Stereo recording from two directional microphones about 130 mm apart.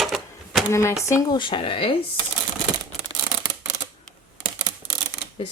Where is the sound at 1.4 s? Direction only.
40° left (ahead or behind).